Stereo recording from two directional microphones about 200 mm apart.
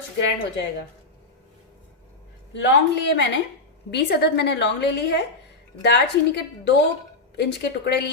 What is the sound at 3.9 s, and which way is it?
A woman's voice, 55° left (ahead or behind).